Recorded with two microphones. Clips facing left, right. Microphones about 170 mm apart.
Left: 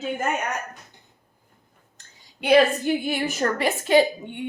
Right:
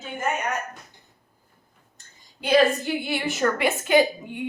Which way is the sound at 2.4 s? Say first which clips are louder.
Left 2 dB; 60° left (ahead or behind).